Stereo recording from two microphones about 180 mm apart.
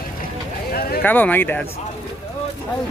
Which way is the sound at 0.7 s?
55° left (ahead or behind).